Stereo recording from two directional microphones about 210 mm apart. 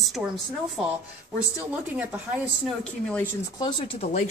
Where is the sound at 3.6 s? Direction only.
30° left (ahead or behind).